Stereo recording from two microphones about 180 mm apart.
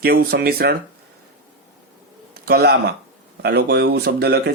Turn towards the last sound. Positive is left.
turn(degrees=-65)  # may be behind; listen again after turning